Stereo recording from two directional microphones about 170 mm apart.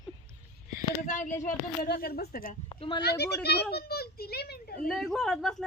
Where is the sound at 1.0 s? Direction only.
45° left (ahead or behind).